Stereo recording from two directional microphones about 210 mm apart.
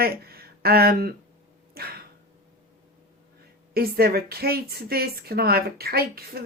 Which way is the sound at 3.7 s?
45° right (ahead or behind).